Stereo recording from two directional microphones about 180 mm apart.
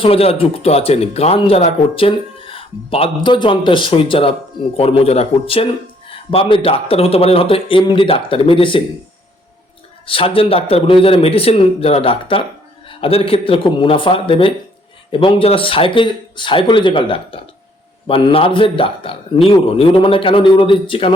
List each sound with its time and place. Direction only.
0.0 s speech: 30° left (ahead or behind)
10.1 s a man's voice: 30° left (ahead or behind)